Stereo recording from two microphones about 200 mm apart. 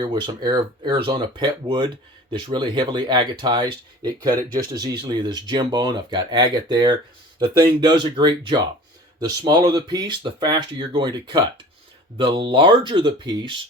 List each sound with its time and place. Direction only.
0.0 s speech: 25° right (ahead or behind)